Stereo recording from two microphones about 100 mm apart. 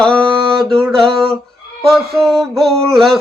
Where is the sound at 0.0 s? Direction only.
5° left (ahead or behind).